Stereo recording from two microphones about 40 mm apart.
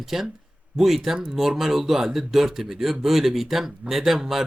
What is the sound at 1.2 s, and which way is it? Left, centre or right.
Speech, centre.